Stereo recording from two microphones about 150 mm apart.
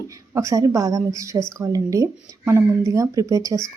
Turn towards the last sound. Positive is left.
turn(degrees=-20)  # may be behind; listen again after turning